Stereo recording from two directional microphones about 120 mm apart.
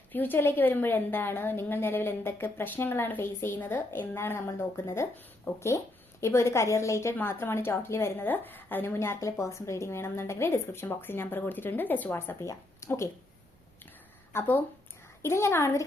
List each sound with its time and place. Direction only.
0.1 s a woman's voice: 15° left (ahead or behind)
14.3 s a woman's voice: 15° left (ahead or behind)